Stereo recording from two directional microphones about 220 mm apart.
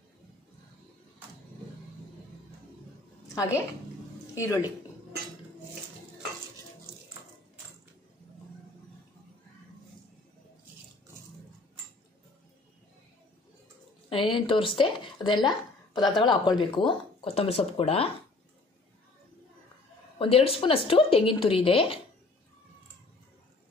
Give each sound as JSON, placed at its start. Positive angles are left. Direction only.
{"t": 4.4, "sound": "a woman's voice", "side_deg": 15}
{"t": 14.0, "sound": "speech", "side_deg": 25}
{"t": 20.2, "sound": "speech", "side_deg": 25}